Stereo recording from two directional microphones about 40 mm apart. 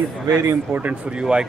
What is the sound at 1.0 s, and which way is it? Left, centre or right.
Speech, right.